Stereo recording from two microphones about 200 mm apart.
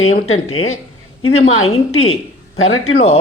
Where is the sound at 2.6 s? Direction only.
90° left.